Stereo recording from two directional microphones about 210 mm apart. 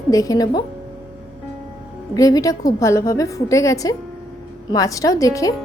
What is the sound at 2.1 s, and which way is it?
Speech, 15° left (ahead or behind).